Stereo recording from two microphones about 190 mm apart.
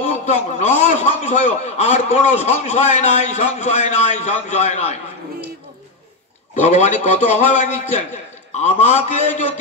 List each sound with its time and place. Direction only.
0.1 s a man's voice: 35° left (ahead or behind)
6.5 s a man's voice: 40° left (ahead or behind)